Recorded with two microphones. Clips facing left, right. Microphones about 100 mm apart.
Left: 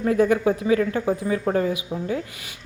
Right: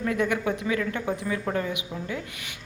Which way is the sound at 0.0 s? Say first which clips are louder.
Left 7 dB; 35° left (ahead or behind).